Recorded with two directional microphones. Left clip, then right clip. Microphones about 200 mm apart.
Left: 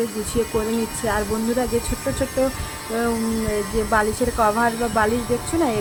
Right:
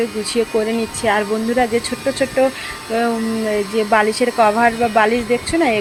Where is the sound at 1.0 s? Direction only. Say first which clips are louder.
Right 7 dB; 5° right (ahead or behind).